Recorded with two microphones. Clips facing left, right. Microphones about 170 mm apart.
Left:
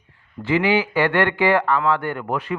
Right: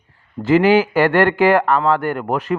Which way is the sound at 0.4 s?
45° right (ahead or behind).